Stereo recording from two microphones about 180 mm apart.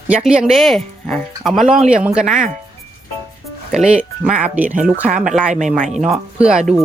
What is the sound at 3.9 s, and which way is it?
Speech, 5° right (ahead or behind).